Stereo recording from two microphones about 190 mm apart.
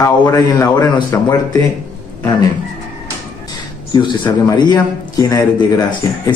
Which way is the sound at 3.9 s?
20° left (ahead or behind).